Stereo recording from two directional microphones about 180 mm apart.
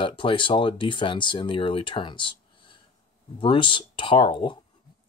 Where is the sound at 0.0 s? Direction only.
30° left (ahead or behind).